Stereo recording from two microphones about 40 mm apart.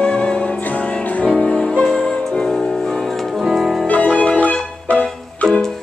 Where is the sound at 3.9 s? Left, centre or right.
Left.